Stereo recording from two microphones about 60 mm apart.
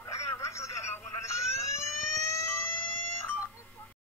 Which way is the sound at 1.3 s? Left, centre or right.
Left.